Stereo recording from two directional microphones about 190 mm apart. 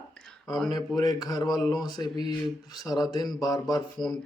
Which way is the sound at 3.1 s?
20° left (ahead or behind).